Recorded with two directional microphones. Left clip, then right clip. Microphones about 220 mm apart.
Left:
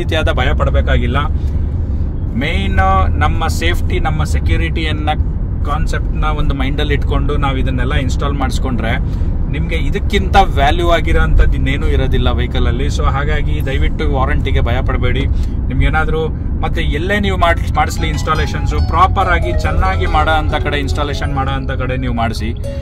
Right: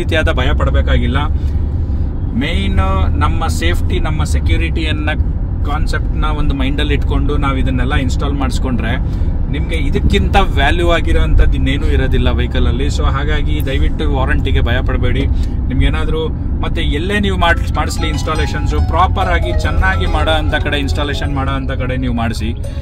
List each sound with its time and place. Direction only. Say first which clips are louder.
0.1 s speech: even; 15° right (ahead or behind)
2.4 s speech: left 5 dB; 5° right (ahead or behind)
6.4 s speech: right 1 dB; 15° right (ahead or behind)